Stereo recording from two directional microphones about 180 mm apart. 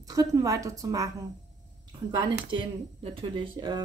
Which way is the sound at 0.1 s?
20° right (ahead or behind).